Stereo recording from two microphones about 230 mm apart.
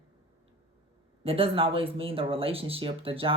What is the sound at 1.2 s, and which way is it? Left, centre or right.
Speech, right.